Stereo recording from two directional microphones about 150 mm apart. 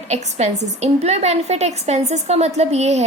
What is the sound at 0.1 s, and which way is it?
A woman's voice, 50° right (ahead or behind).